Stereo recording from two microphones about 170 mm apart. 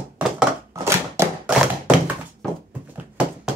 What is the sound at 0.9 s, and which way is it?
Thunk, 10° right (ahead or behind).